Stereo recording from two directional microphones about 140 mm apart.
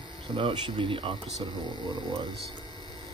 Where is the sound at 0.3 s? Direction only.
35° right (ahead or behind).